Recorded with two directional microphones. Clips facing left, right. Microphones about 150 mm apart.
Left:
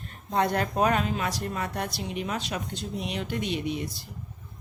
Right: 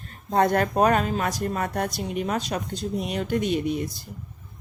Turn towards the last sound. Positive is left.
turn(degrees=-45)  # may be behind; listen again after turning